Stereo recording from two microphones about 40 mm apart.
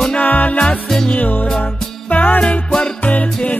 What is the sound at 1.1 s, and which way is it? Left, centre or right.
Music, left.